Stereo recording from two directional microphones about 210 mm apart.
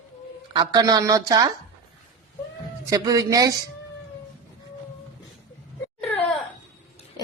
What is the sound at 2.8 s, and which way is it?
Speech, 15° right (ahead or behind).